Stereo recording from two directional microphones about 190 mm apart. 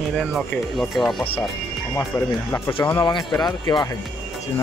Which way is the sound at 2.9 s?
20° left (ahead or behind).